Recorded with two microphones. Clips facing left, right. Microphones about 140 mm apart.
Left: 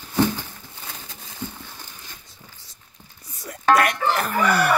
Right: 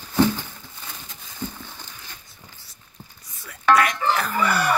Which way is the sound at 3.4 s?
40° left (ahead or behind).